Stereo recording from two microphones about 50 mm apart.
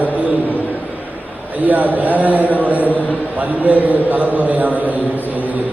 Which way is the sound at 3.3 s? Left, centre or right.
Right.